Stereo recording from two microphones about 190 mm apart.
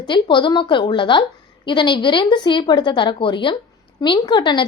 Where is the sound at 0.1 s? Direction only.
25° left (ahead or behind).